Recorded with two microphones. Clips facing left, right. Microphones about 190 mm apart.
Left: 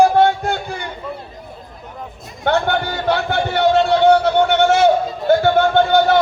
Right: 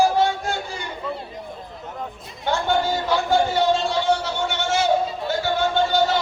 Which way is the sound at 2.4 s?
60° left (ahead or behind).